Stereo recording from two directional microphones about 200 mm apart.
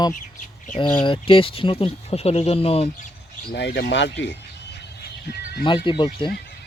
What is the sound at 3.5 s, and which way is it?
Speech, 60° left (ahead or behind).